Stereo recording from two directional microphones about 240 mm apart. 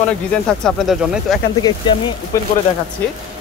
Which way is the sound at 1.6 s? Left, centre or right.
Centre.